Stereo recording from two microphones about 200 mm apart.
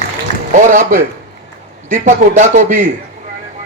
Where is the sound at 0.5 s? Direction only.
40° right (ahead or behind).